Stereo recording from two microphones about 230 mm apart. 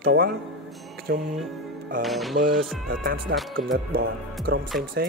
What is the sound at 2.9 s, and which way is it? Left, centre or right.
Speech, right.